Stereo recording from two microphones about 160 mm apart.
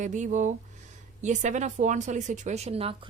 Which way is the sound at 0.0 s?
50° right (ahead or behind).